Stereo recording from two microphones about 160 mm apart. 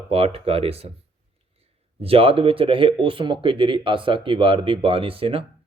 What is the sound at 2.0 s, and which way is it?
Speech, 35° right (ahead or behind).